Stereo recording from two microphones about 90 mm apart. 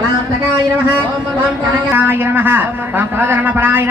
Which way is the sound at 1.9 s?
20° right (ahead or behind).